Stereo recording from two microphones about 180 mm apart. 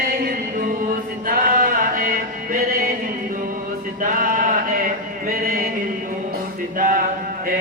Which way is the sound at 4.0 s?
50° right (ahead or behind).